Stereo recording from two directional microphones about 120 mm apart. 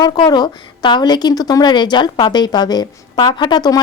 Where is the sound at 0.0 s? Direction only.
35° left (ahead or behind).